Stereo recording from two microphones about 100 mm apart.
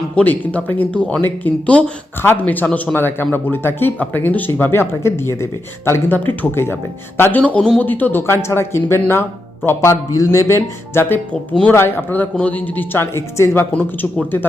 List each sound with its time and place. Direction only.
0.2 s a man's voice: 15° left (ahead or behind)
11.3 s a man's voice: 10° left (ahead or behind)
11.7 s speech: 25° left (ahead or behind)